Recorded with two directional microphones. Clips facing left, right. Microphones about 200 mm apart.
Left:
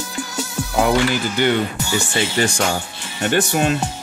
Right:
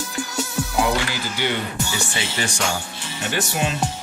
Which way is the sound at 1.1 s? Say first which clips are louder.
Left 7 dB; 55° left (ahead or behind).